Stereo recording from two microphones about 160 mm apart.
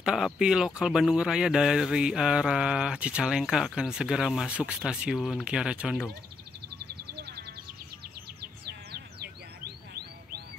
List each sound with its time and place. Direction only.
0.0 s speech: 5° right (ahead or behind)
6.9 s music: 85° right
8.4 s bird: 80° right